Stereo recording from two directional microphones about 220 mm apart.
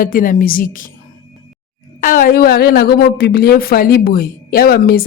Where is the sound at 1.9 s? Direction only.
40° left (ahead or behind).